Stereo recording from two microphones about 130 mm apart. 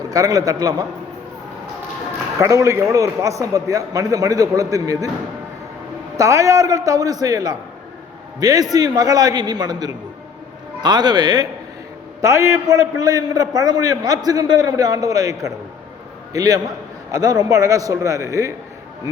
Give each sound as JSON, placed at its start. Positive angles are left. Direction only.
{"t": 0.1, "sound": "a man's voice", "side_deg": -25}
{"t": 2.4, "sound": "a man's voice", "side_deg": -25}
{"t": 6.1, "sound": "a man's voice", "side_deg": -25}